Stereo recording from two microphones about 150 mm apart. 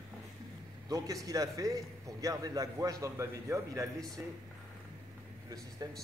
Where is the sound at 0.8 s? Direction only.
25° right (ahead or behind).